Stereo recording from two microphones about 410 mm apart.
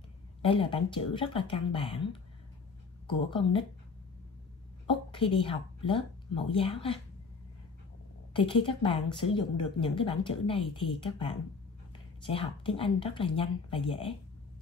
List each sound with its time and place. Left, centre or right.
0.4 s a woman's voice: centre
3.1 s a woman's voice: centre
4.8 s a woman's voice: centre
8.3 s a woman's voice: centre